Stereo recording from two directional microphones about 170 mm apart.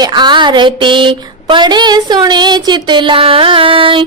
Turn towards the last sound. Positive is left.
turn(degrees=-30)  # may be behind; listen again after turning